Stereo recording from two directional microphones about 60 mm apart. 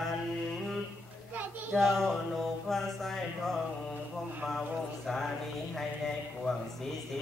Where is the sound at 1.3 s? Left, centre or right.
Right.